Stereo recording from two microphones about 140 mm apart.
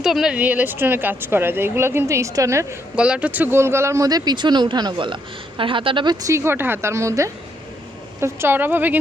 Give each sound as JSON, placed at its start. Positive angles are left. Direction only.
{"t": 0.0, "sound": "speech", "side_deg": -5}
{"t": 2.9, "sound": "speech", "side_deg": -10}
{"t": 6.2, "sound": "speech", "side_deg": -20}